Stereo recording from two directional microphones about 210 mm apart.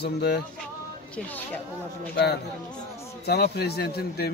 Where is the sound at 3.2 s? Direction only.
50° left (ahead or behind).